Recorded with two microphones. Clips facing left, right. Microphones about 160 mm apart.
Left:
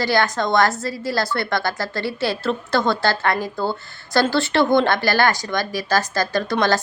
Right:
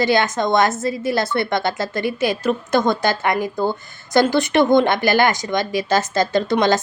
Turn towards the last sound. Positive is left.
turn(degrees=-20)  # may be behind; listen again after turning